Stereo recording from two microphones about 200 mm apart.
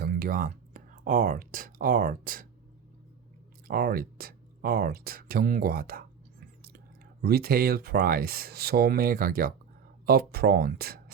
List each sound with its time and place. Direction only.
0.0 s speech: 45° right (ahead or behind)
3.7 s speech: 45° right (ahead or behind)